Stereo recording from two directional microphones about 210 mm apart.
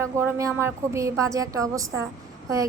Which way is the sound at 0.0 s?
15° right (ahead or behind).